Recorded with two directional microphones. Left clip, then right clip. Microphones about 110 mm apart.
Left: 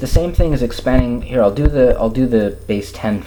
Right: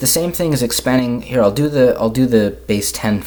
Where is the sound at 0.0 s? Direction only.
30° right (ahead or behind).